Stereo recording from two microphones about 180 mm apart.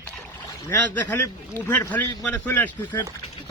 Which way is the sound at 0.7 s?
10° left (ahead or behind).